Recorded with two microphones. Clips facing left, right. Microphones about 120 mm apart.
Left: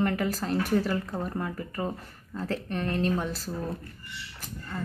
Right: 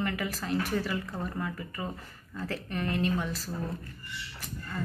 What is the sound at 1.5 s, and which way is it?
Speech, 45° left (ahead or behind).